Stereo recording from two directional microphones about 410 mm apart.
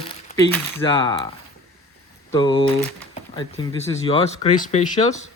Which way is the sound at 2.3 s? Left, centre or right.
Centre.